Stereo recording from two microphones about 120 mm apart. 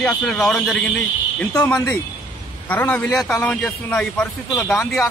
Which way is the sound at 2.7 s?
15° left (ahead or behind).